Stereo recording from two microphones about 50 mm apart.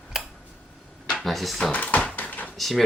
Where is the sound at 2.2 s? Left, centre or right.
Left.